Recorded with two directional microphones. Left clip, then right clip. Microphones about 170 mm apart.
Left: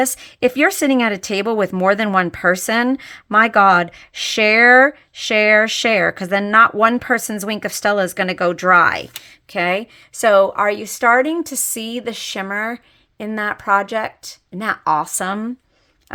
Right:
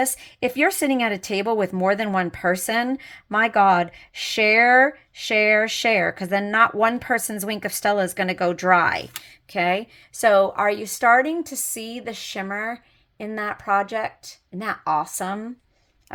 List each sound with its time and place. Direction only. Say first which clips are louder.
0.0 s a woman's voice: left 6 dB; 25° left (ahead or behind)